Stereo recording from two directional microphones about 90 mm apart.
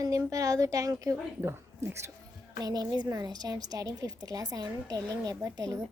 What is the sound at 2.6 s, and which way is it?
A woman's voice, 45° right (ahead or behind).